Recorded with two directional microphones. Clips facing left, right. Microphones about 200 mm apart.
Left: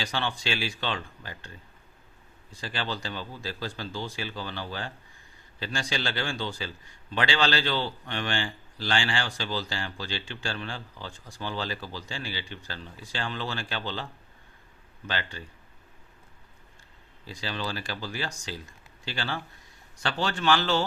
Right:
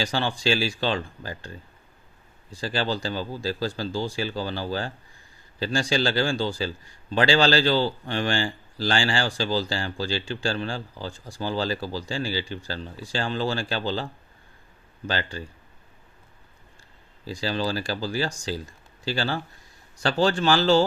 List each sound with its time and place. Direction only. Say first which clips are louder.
0.0 s a man's voice: right 6 dB; 35° right (ahead or behind)
17.2 s a man's voice: right 7 dB; 35° right (ahead or behind)